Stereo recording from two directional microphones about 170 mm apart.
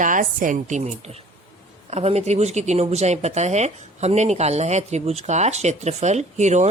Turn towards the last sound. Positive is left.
turn(degrees=-45)  # may be behind; listen again after turning